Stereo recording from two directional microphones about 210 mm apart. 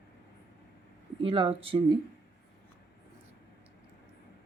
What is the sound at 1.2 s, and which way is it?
Speech, 25° right (ahead or behind).